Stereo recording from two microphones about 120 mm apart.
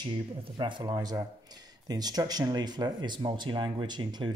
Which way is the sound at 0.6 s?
40° right (ahead or behind).